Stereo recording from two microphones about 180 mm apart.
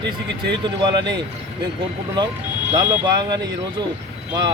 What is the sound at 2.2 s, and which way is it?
Speech, 25° right (ahead or behind).